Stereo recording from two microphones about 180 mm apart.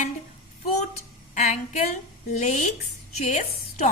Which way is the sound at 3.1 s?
40° left (ahead or behind).